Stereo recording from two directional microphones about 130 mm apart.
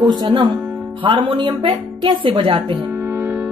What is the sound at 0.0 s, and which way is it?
A woman's voice, 35° right (ahead or behind).